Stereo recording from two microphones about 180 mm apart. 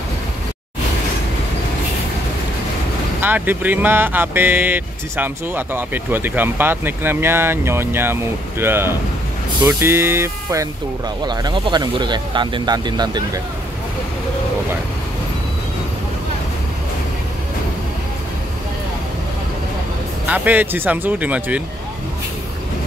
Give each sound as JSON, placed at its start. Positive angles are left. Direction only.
{"t": 3.2, "sound": "speech", "side_deg": -10}
{"t": 20.2, "sound": "speech", "side_deg": -10}